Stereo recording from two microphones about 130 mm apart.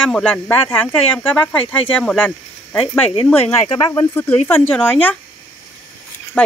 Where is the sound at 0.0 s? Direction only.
10° left (ahead or behind).